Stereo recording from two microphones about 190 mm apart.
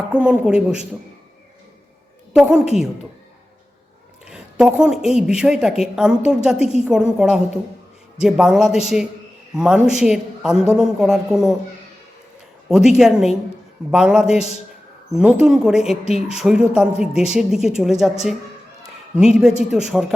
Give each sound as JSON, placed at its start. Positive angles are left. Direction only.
{"t": 0.1, "sound": "speech", "side_deg": -5}
{"t": 2.3, "sound": "a woman's voice", "side_deg": -5}
{"t": 4.3, "sound": "speech", "side_deg": -5}
{"t": 12.6, "sound": "speech", "side_deg": 0}